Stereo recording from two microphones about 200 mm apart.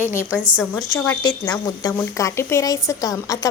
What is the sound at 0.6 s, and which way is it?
A woman's voice, 5° left (ahead or behind).